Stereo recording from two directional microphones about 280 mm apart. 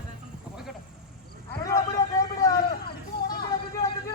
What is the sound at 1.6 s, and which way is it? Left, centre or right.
Vehicle, centre.